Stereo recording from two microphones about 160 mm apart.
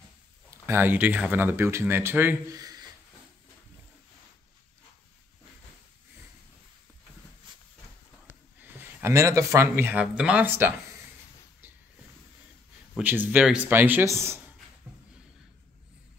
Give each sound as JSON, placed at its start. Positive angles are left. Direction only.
{"t": 0.5, "sound": "speech", "side_deg": -15}
{"t": 7.5, "sound": "a sound", "side_deg": -30}
{"t": 8.5, "sound": "speech", "side_deg": -10}
{"t": 12.9, "sound": "speech", "side_deg": -10}